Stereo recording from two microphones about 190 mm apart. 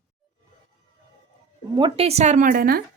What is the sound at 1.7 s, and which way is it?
A woman's voice, 25° right (ahead or behind).